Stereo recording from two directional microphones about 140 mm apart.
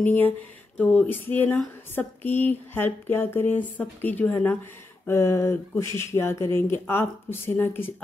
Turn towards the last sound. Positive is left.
turn(degrees=15)  # may be behind; listen again after turning